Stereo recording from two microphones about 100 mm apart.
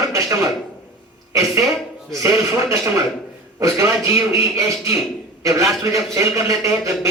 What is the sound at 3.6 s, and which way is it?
A man's voice, 30° right (ahead or behind).